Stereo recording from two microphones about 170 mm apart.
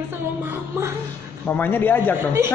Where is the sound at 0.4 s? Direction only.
15° right (ahead or behind).